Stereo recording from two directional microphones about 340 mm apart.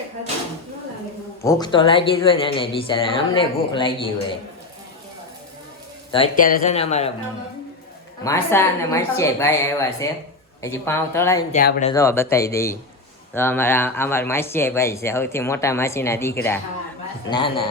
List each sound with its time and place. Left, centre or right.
1.5 s speech: centre
6.1 s speech: centre
8.2 s speech: centre
11.5 s speech: left
11.9 s speech: centre